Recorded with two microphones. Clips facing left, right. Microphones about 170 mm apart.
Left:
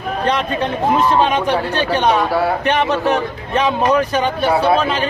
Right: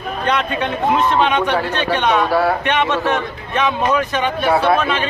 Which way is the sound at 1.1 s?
35° left (ahead or behind).